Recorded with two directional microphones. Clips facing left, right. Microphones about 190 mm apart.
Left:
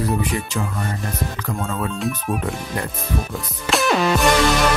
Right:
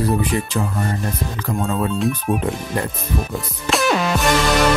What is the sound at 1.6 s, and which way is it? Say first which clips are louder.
Speech: right 5 dB; 30° right (ahead or behind).